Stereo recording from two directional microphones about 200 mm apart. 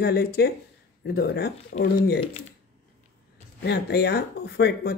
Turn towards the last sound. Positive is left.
turn(degrees=55)  # may be behind; listen again after turning